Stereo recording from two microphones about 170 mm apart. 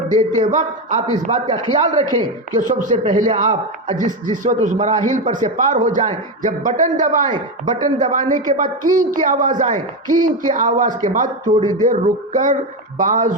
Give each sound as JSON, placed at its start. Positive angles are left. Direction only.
{"t": 0.1, "sound": "a man's voice", "side_deg": -45}
{"t": 11.6, "sound": "a man's voice", "side_deg": -25}
{"t": 11.9, "sound": "a man's voice", "side_deg": -50}